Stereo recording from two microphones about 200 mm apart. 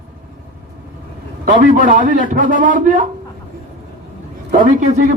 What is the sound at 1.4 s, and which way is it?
A man's voice, 40° right (ahead or behind).